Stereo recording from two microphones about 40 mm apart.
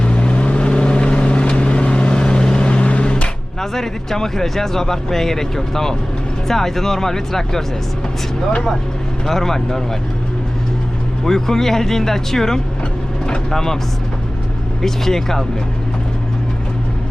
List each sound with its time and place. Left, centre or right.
0.0 s vehicle: left
3.6 s speech: centre
9.2 s speech: centre
11.3 s speech: centre
14.8 s speech: centre